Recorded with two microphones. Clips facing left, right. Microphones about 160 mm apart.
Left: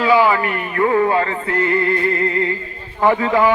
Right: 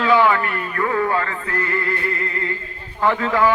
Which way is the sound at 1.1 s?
25° left (ahead or behind).